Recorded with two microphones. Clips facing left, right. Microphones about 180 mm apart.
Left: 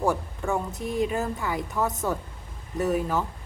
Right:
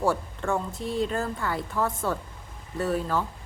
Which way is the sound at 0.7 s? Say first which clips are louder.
Left 1 dB; 20° left (ahead or behind).